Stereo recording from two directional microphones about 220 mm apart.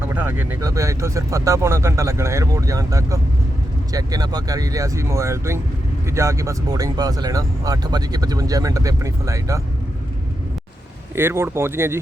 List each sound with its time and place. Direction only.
0.0 s speech: 10° right (ahead or behind)
11.1 s speech: 10° right (ahead or behind)